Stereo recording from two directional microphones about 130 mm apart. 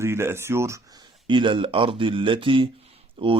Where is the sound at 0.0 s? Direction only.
20° right (ahead or behind).